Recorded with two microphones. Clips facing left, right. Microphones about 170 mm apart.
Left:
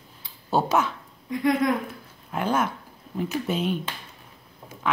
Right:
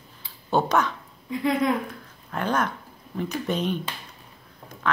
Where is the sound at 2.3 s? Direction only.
10° left (ahead or behind).